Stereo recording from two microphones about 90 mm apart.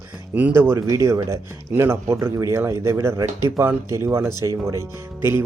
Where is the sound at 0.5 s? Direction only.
30° right (ahead or behind).